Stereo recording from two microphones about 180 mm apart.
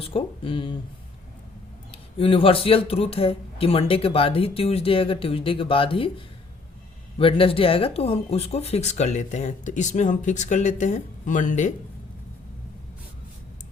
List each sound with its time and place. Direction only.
0.0 s speech: 30° left (ahead or behind)
1.9 s speech: 30° left (ahead or behind)